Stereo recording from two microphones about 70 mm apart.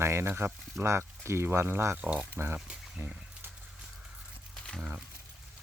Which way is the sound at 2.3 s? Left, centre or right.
Right.